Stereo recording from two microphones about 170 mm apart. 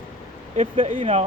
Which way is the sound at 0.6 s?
40° right (ahead or behind).